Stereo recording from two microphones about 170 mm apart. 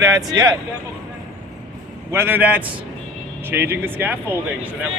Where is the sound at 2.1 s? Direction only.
10° right (ahead or behind).